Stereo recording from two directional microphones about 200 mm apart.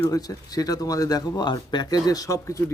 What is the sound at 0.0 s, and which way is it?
Speech, 20° left (ahead or behind).